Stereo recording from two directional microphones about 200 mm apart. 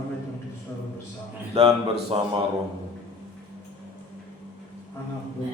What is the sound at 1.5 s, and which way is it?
Speech, 25° right (ahead or behind).